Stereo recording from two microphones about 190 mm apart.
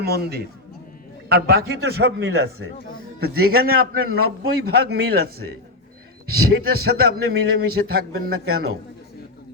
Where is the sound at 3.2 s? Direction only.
55° right (ahead or behind).